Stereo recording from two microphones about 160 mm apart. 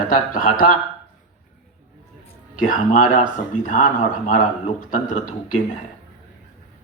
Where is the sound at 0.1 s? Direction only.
60° left (ahead or behind).